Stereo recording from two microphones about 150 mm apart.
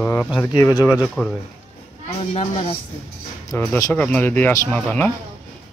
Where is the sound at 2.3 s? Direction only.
40° left (ahead or behind).